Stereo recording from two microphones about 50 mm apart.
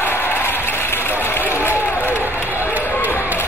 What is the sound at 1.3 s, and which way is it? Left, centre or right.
Run, left.